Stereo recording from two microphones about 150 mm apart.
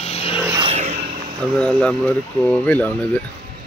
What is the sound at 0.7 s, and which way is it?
Vehicle, 45° right (ahead or behind).